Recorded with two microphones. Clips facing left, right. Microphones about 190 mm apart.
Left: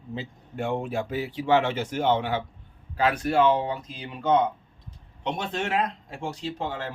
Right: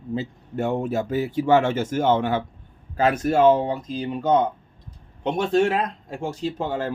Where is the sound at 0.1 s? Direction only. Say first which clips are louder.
Right 7 dB; 40° right (ahead or behind).